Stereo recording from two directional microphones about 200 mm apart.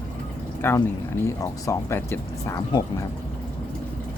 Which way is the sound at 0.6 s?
10° left (ahead or behind).